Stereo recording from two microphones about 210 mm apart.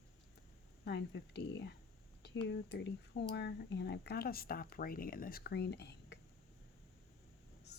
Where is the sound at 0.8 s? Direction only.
55° left (ahead or behind).